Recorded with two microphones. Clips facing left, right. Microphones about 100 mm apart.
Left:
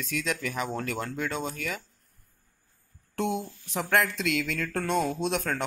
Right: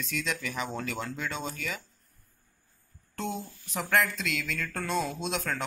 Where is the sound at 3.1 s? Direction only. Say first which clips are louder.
Left 5 dB; 65° left (ahead or behind).